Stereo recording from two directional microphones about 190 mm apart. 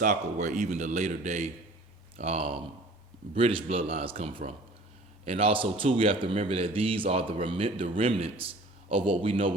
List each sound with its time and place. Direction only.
0.0 s a man's voice: 40° right (ahead or behind)